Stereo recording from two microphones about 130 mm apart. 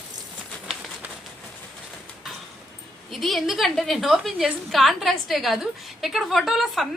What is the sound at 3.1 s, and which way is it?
A woman's voice, centre (ahead or behind).